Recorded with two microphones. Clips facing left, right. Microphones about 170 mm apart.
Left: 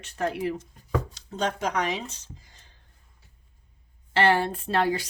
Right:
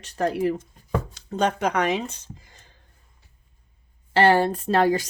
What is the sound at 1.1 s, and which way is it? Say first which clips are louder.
Speech: right 5 dB; 60° right (ahead or behind).